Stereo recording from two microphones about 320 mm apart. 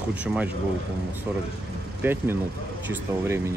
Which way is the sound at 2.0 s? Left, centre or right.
Centre.